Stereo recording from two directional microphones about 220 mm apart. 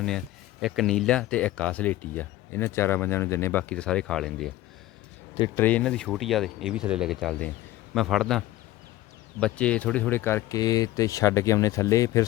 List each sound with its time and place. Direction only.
0.6 s speech: centre (ahead or behind)
5.5 s speech: 5° left (ahead or behind)